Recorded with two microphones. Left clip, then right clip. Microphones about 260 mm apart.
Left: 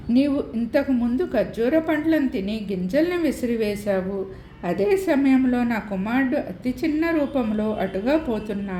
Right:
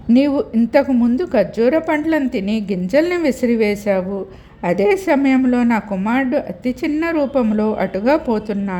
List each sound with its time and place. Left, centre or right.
0.1 s a woman's voice: right